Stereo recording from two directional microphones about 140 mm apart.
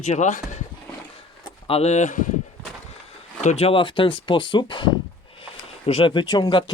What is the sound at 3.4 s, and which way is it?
Speech, 45° left (ahead or behind).